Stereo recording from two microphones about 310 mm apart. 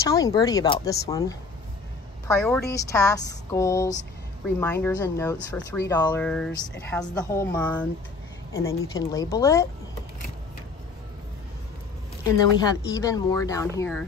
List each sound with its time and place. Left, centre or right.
0.0 s speech: centre
12.9 s speech: centre